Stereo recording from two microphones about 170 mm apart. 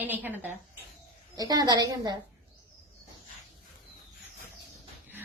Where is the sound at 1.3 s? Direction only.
20° right (ahead or behind).